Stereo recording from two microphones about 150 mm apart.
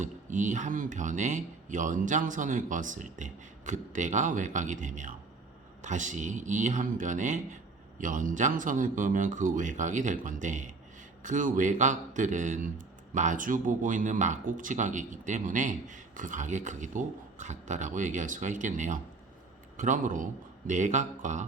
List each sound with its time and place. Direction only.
0.0 s speech: 55° right (ahead or behind)